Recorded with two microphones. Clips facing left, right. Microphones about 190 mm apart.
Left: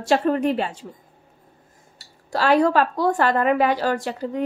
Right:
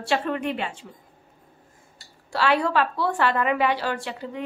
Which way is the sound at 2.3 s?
40° left (ahead or behind).